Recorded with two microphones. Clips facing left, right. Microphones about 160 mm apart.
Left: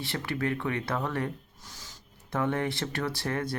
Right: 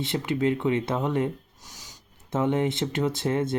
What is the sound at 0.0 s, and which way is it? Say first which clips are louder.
Speech: right 6 dB; 20° right (ahead or behind).